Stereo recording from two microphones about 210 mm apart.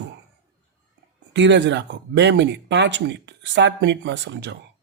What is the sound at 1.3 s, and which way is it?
Speech, 55° right (ahead or behind).